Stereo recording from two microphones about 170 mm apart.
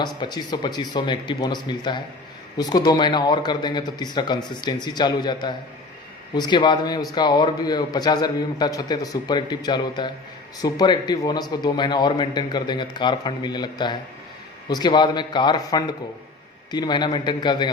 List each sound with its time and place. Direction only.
0.0 s a man's voice: 25° left (ahead or behind)